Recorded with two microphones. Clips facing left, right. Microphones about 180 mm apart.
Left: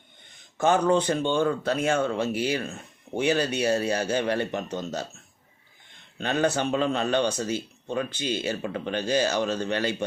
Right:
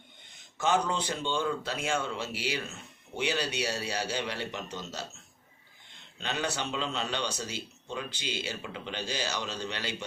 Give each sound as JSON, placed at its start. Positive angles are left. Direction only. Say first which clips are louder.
{"t": 0.5, "sound": "speech", "louder": "left 7 dB", "side_deg": 55}